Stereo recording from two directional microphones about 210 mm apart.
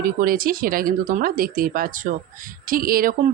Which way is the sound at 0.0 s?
45° right (ahead or behind).